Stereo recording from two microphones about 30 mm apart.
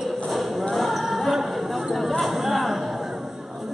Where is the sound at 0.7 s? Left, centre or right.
Centre.